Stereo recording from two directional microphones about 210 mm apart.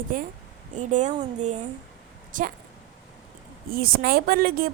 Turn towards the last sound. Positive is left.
turn(degrees=-45)  # may be behind; listen again after turning